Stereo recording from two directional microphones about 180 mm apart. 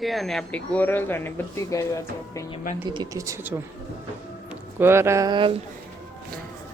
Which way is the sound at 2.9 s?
20° right (ahead or behind).